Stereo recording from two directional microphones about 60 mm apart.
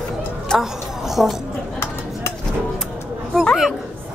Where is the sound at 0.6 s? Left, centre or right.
Centre.